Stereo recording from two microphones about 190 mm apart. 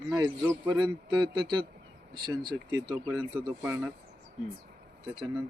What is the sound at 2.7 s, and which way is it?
Speech, 15° right (ahead or behind).